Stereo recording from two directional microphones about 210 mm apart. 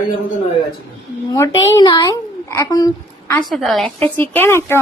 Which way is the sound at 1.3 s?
15° left (ahead or behind).